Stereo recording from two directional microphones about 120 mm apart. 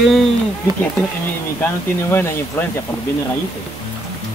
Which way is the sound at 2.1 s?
20° left (ahead or behind).